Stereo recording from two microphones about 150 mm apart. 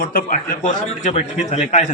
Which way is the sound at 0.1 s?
70° left (ahead or behind).